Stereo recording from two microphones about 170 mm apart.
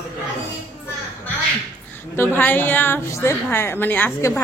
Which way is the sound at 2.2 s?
10° left (ahead or behind).